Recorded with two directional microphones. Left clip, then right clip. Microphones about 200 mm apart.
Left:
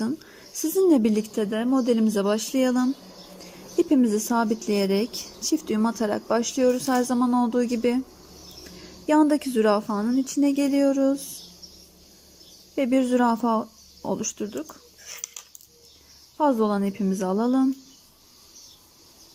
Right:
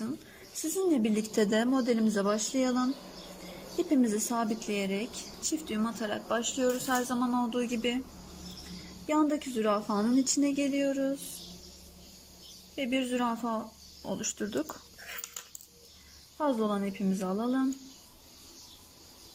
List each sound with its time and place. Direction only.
0.6 s speech: 25° left (ahead or behind)
1.4 s a woman's voice: 10° left (ahead or behind)
9.0 s speech: 20° left (ahead or behind)
12.7 s speech: 25° left (ahead or behind)
14.4 s speech: 5° left (ahead or behind)
16.4 s speech: 20° left (ahead or behind)